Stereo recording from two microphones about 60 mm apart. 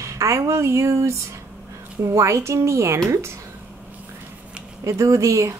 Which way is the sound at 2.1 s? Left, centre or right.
Right.